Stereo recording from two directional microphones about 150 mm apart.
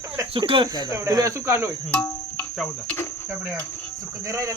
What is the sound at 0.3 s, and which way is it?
Cricket, 35° right (ahead or behind).